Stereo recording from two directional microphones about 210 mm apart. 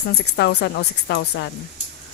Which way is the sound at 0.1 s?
50° left (ahead or behind).